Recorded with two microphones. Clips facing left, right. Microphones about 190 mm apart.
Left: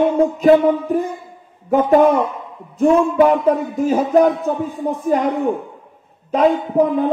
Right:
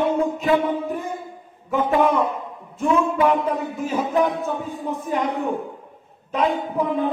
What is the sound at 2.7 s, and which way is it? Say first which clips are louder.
Music: left 7 dB; 40° left (ahead or behind).